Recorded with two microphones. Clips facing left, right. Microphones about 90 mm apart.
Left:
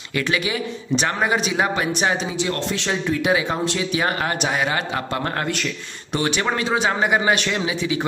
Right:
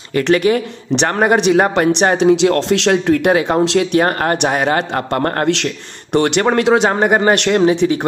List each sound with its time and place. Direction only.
0.2 s a man's voice: 55° right (ahead or behind)
3.6 s a man's voice: 75° right (ahead or behind); by 5.5 s 50° right (ahead or behind)
6.1 s a man's voice: 60° right (ahead or behind)
6.9 s a man's voice: 50° right (ahead or behind)